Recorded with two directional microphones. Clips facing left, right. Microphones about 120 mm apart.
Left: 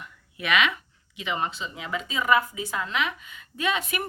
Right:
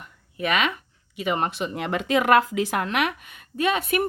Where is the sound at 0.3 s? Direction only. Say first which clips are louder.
Right 1 dB; 45° right (ahead or behind); by 3.2 s 65° right (ahead or behind).